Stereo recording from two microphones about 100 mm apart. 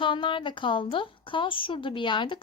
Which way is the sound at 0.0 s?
55° left (ahead or behind).